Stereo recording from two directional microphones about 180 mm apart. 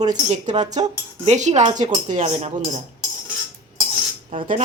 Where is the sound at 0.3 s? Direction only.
40° right (ahead or behind).